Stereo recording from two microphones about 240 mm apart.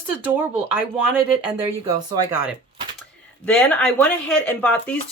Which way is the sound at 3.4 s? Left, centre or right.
Centre.